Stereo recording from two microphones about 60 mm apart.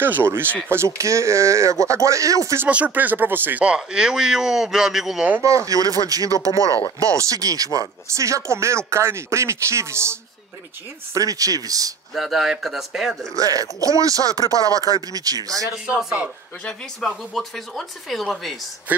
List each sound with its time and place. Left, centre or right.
0.0 s speech: right
0.7 s speech: right
2.7 s speech: right
3.6 s speech: centre
5.7 s speech: right
8.1 s speech: right
11.1 s speech: right
12.1 s speech: centre
13.3 s speech: right
17.0 s speech: centre